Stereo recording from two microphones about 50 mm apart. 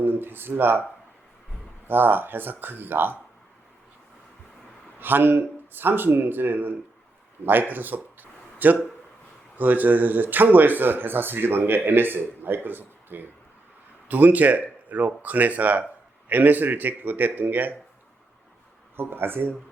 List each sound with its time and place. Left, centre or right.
0.0 s speech: right
1.9 s speech: right
4.9 s speech: right
7.7 s a sound: right
9.6 s speech: right
18.9 s speech: right